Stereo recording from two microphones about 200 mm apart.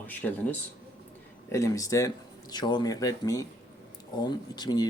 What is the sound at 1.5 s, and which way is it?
Speech, 15° left (ahead or behind).